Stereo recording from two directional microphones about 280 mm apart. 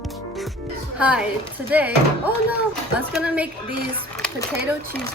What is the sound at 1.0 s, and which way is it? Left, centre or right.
Speech, centre.